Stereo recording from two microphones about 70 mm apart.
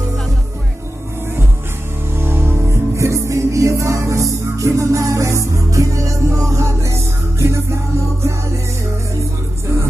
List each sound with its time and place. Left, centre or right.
2.1 s music: right
3.0 s music: right